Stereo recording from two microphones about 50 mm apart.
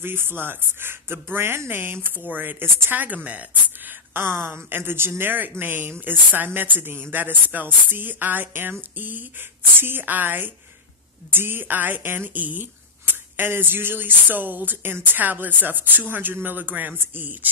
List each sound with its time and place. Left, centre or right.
0.0 s speech: right
4.1 s speech: right